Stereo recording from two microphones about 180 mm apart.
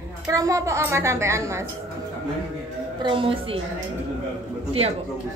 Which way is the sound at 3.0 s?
30° right (ahead or behind).